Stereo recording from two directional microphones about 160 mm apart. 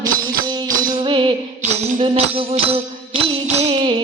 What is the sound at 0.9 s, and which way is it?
Music, 30° right (ahead or behind).